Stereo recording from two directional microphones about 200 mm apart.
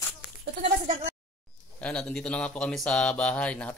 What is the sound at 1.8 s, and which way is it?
Speech, 5° left (ahead or behind).